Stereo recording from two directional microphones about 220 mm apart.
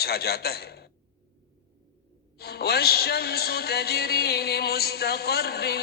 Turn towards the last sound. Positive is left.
turn(degrees=45)  # may be behind; listen again after turning